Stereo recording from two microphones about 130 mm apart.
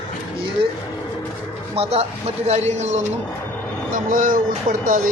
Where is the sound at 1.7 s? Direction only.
50° right (ahead or behind).